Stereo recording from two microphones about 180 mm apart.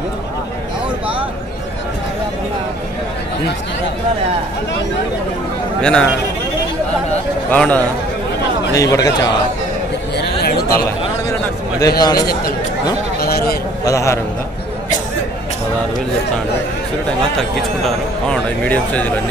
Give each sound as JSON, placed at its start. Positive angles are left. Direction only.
{"t": 5.8, "sound": "a man's voice", "side_deg": 5}
{"t": 7.5, "sound": "a man's voice", "side_deg": 5}
{"t": 8.7, "sound": "a man's voice", "side_deg": 20}
{"t": 10.1, "sound": "a sound", "side_deg": 55}
{"t": 12.0, "sound": "a man's voice", "side_deg": 20}
{"t": 13.2, "sound": "speech", "side_deg": 60}
{"t": 13.8, "sound": "a man's voice", "side_deg": 15}
{"t": 17.4, "sound": "speech", "side_deg": 0}